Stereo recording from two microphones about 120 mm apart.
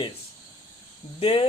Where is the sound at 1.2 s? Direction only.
55° left (ahead or behind).